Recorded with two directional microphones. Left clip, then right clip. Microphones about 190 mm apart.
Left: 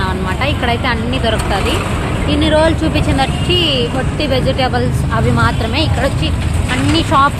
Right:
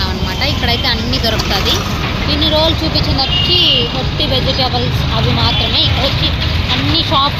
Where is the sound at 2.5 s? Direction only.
25° left (ahead or behind).